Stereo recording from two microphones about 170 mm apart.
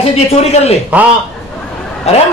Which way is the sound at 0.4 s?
40° left (ahead or behind).